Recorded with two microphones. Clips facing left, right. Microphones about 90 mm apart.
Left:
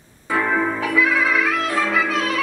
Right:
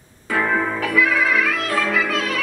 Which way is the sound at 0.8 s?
20° left (ahead or behind).